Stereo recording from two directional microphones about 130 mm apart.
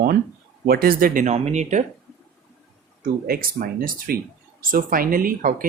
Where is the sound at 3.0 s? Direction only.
90° right.